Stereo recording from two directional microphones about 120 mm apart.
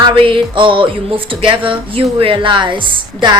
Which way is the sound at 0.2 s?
45° right (ahead or behind).